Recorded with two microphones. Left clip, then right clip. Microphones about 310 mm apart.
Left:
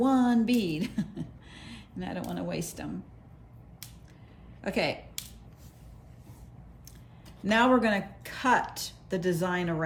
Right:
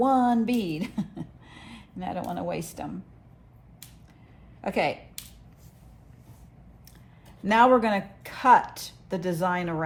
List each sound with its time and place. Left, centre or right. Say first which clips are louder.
0.0 s speech: right 4 dB; centre
4.6 s speech: right 3 dB; centre
7.4 s a woman's voice: right 5 dB; centre